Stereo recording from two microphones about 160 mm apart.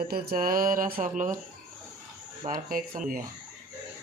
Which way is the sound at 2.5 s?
60° right (ahead or behind).